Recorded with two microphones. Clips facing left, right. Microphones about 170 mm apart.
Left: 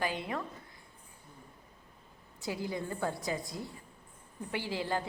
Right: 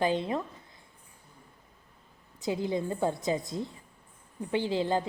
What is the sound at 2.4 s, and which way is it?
A woman's voice, 20° right (ahead or behind).